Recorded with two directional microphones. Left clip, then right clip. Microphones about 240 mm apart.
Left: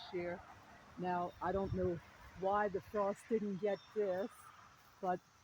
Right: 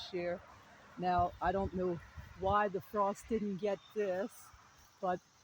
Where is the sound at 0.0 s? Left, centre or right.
Right.